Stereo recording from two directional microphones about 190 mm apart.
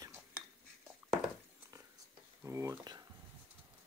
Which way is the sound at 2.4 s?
15° right (ahead or behind).